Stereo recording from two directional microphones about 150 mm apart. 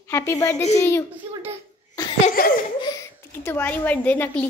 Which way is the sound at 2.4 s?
80° left.